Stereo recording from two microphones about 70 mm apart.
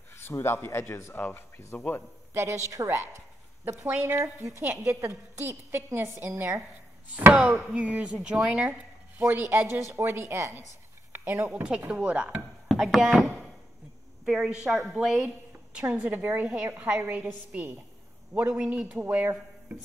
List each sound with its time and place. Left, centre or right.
0.1 s speech: left
2.3 s a woman's voice: right
3.6 s a woman's voice: right
4.0 s a woman's voice: right
7.4 s speech: centre
9.2 s speech: right
11.1 s speech: right
11.9 s speech: centre
12.7 s a woman's voice: centre
15.8 s a woman's voice: right